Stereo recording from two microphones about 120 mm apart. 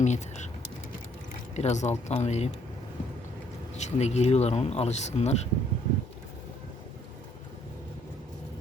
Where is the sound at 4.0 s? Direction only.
65° left (ahead or behind).